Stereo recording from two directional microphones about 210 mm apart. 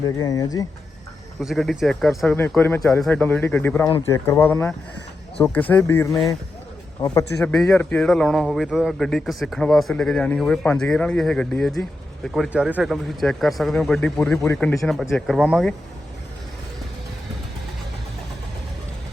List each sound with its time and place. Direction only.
0.0 s speech: 20° left (ahead or behind)
1.4 s speech: centre (ahead or behind); by 7.5 s 15° left (ahead or behind)
7.5 s a man's voice: centre (ahead or behind)